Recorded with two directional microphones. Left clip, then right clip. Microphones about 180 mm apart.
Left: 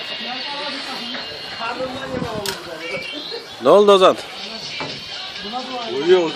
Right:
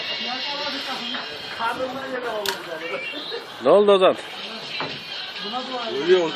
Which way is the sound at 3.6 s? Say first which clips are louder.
Left 4 dB; 30° left (ahead or behind).